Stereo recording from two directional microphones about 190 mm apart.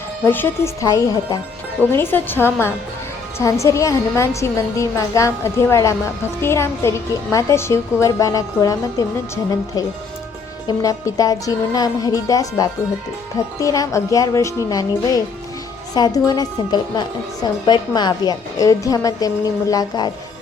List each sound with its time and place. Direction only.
0.3 s a woman's voice: 10° left (ahead or behind)